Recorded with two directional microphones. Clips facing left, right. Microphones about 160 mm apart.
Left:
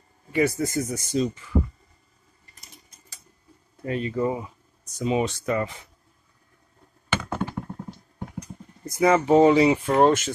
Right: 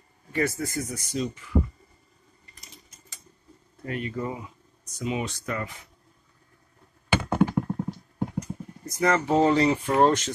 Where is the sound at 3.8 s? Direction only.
25° left (ahead or behind).